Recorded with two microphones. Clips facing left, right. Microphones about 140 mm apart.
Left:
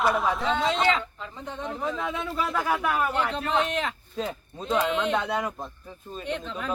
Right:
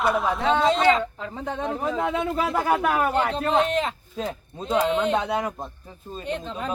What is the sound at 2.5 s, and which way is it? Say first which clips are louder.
Speech: right 3 dB; 45° right (ahead or behind).